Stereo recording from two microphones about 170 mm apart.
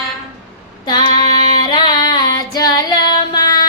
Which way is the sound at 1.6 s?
25° left (ahead or behind).